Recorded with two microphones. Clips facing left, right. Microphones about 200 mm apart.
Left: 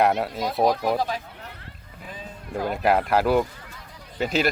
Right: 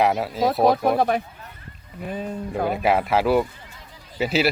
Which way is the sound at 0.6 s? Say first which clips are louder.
Right 2 dB; 60° right (ahead or behind).